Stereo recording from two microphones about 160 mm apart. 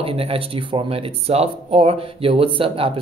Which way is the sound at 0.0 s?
35° right (ahead or behind).